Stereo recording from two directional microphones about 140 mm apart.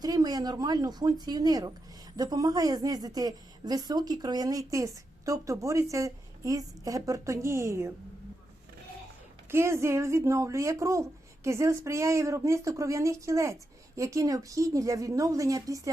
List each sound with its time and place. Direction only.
0.0 s a woman's voice: 25° right (ahead or behind)
9.5 s a woman's voice: 20° right (ahead or behind)